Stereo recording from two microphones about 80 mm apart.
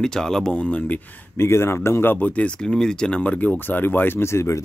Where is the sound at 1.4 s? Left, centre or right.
Left.